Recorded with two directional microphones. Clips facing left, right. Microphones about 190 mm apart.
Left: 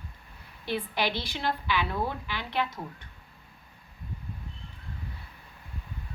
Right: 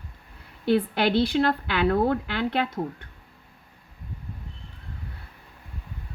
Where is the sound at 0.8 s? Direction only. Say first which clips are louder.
Right 7 dB; 60° right (ahead or behind).